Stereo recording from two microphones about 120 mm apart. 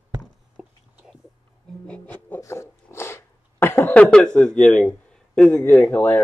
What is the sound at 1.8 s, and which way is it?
Music, 10° left (ahead or behind).